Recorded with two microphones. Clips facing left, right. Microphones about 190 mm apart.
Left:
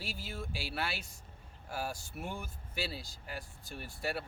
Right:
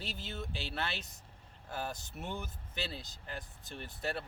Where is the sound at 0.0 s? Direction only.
10° left (ahead or behind).